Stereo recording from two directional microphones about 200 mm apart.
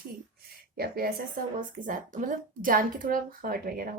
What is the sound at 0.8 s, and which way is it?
Speech, 50° right (ahead or behind).